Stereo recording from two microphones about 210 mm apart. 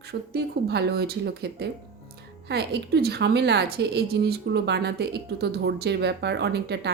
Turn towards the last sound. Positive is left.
turn(degrees=-55)  # may be behind; listen again after turning